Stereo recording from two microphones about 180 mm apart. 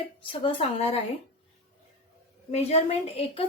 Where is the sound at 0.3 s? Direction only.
30° left (ahead or behind).